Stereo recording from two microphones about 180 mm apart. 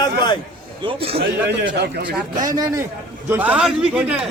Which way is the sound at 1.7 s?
70° right (ahead or behind).